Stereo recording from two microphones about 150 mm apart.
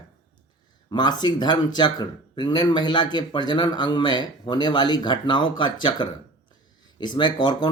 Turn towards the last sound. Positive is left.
turn(degrees=30)  # may be behind; listen again after turning